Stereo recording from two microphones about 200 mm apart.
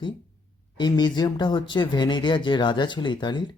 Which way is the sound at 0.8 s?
20° left (ahead or behind).